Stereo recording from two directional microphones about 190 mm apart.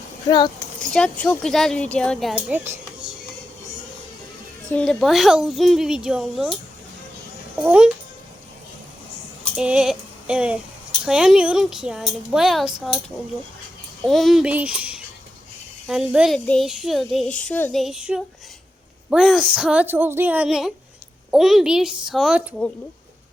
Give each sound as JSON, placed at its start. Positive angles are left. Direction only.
{"t": 0.3, "sound": "speech", "side_deg": 20}
{"t": 1.2, "sound": "a woman's voice", "side_deg": 5}
{"t": 2.3, "sound": "speech", "side_deg": -10}
{"t": 4.7, "sound": "a woman's voice", "side_deg": 5}
{"t": 7.6, "sound": "speech", "side_deg": -10}
{"t": 9.6, "sound": "a sound", "side_deg": -5}
{"t": 11.0, "sound": "a woman's voice", "side_deg": -5}
{"t": 14.0, "sound": "a woman's voice", "side_deg": 0}